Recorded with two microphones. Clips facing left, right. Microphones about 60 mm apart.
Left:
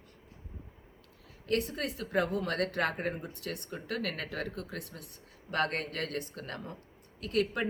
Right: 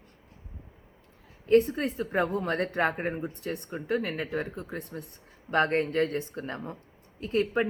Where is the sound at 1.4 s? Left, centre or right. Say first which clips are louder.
Right 10 dB; right.